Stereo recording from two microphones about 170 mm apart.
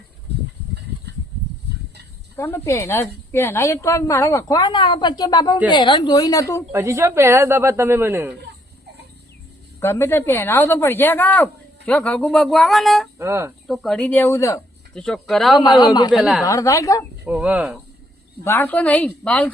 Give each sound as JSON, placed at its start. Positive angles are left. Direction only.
{"t": 2.3, "sound": "a woman's voice", "side_deg": 15}
{"t": 6.7, "sound": "speech", "side_deg": -15}
{"t": 9.8, "sound": "a woman's voice", "side_deg": 15}
{"t": 13.1, "sound": "speech", "side_deg": -15}
{"t": 13.7, "sound": "a woman's voice", "side_deg": 0}
{"t": 14.9, "sound": "speech", "side_deg": 5}
{"t": 15.5, "sound": "a woman's voice", "side_deg": 25}
{"t": 16.1, "sound": "speech", "side_deg": 0}
{"t": 16.4, "sound": "a woman's voice", "side_deg": 20}
{"t": 17.2, "sound": "speech", "side_deg": -5}
{"t": 18.4, "sound": "a woman's voice", "side_deg": 15}